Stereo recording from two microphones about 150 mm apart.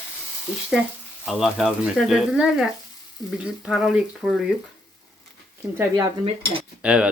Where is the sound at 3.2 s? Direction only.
25° left (ahead or behind).